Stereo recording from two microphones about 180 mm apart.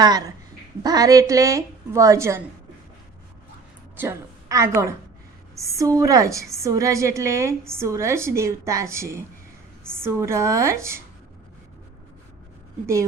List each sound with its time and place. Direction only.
0.0 s a woman's voice: 20° right (ahead or behind)
3.9 s a woman's voice: 10° right (ahead or behind)
12.8 s a woman's voice: 15° right (ahead or behind)